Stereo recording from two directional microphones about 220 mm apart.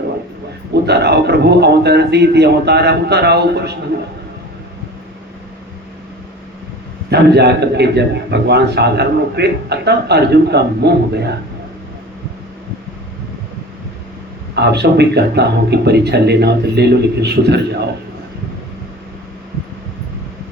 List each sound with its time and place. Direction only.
0.7 s a man's voice: 50° right (ahead or behind)
7.1 s a man's voice: 50° right (ahead or behind)
14.5 s a man's voice: 50° right (ahead or behind)